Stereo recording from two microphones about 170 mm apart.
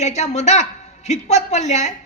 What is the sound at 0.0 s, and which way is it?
A woman's voice, 40° left (ahead or behind).